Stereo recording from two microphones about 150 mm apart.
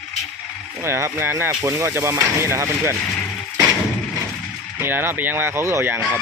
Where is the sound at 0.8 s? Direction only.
15° right (ahead or behind).